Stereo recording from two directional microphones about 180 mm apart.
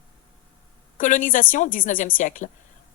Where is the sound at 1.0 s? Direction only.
45° left (ahead or behind).